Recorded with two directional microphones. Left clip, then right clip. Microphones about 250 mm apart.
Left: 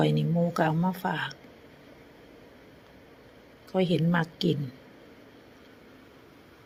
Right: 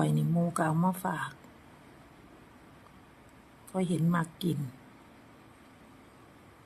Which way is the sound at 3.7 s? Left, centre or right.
Centre.